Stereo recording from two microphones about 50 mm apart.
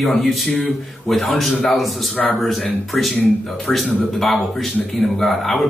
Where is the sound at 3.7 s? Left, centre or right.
Centre.